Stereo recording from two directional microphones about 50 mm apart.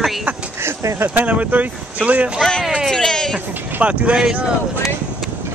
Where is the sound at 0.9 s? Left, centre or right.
Right.